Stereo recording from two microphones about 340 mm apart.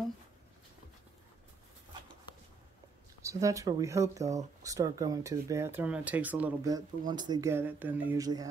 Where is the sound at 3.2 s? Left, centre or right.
Centre.